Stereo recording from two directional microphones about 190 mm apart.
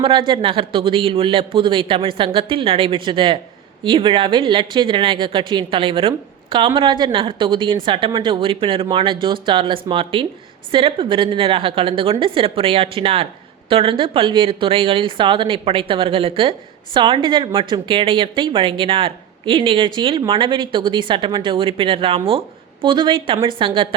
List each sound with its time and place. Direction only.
0.0 s speech: 25° right (ahead or behind)